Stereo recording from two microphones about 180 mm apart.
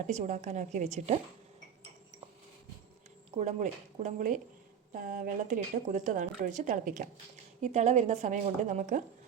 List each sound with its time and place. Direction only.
0.1 s a woman's voice: 45° right (ahead or behind)
3.3 s a woman's voice: 40° right (ahead or behind)